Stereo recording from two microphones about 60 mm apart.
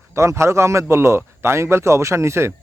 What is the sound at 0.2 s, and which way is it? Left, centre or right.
A man's voice, right.